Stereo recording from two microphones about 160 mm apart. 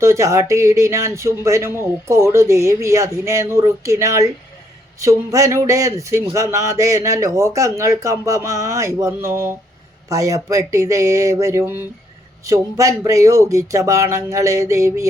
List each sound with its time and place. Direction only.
0.0 s speech: 20° right (ahead or behind)